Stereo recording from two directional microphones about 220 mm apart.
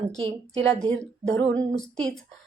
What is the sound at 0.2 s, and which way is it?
Speech, 25° right (ahead or behind).